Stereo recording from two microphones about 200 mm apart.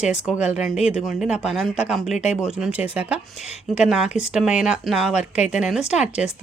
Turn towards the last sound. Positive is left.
turn(degrees=-5)  # may be behind; listen again after turning